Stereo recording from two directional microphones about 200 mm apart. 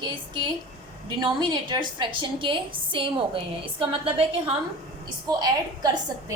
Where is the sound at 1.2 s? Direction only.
20° right (ahead or behind).